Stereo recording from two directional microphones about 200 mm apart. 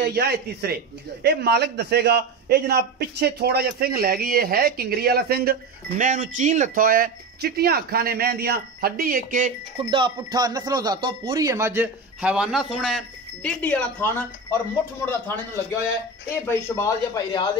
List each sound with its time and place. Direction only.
0.0 s a man's voice: 55° right (ahead or behind)
9.8 s a man's voice: 25° right (ahead or behind); by 15.3 s 10° left (ahead or behind)
16.4 s a man's voice: 15° left (ahead or behind)